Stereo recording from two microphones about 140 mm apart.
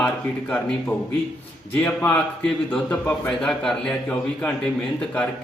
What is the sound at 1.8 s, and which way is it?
A man's voice, 10° left (ahead or behind).